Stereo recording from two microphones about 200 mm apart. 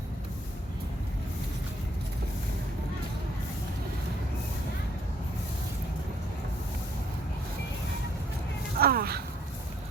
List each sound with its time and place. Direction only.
8.8 s speech: 50° right (ahead or behind)